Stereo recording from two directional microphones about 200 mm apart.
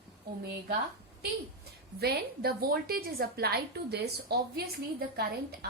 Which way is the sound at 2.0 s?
50° right (ahead or behind).